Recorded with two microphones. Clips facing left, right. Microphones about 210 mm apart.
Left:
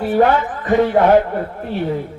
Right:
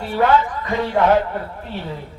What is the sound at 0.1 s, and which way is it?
Speech, 50° left (ahead or behind).